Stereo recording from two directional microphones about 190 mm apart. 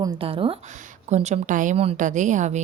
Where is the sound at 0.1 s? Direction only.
30° right (ahead or behind).